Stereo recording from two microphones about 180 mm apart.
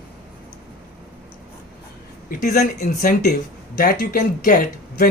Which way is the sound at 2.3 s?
50° left (ahead or behind).